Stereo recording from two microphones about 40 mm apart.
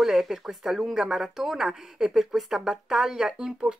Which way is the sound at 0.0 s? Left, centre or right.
Centre.